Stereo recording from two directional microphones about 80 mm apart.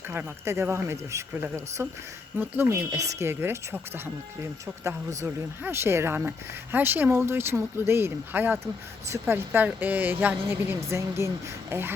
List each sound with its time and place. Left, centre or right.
0.1 s speech: right
10.8 s speech: right